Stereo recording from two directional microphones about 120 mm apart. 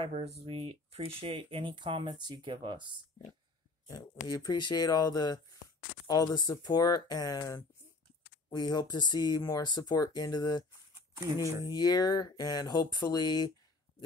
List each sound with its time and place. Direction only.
0.0 s speech: 60° right (ahead or behind); by 3.0 s 40° right (ahead or behind)
3.8 s speech: 30° left (ahead or behind)
11.6 s speech: 35° left (ahead or behind)